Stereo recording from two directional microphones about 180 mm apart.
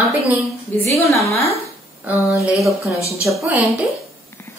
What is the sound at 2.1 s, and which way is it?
A woman's voice, 10° right (ahead or behind).